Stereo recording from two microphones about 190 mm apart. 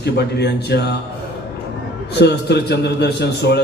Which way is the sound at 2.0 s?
60° left (ahead or behind).